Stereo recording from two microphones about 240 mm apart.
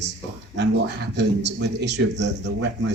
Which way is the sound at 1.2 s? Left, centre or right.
Right.